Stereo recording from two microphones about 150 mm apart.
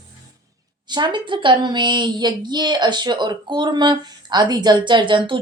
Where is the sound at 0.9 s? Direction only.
30° right (ahead or behind).